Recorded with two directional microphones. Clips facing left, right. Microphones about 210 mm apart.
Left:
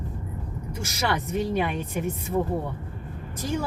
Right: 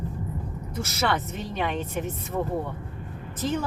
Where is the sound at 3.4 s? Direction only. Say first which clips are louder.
Right 1 dB; 10° left (ahead or behind).